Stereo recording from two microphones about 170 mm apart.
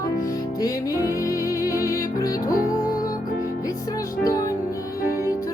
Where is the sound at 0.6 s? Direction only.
20° left (ahead or behind).